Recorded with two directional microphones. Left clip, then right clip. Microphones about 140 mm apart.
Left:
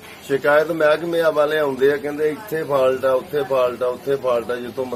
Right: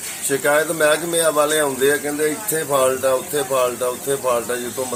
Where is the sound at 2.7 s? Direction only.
Centre (ahead or behind).